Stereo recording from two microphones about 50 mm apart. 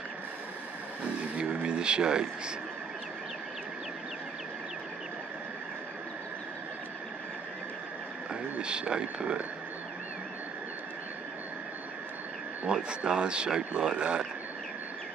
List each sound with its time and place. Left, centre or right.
1.4 s speech: right
8.3 s speech: centre
12.7 s speech: centre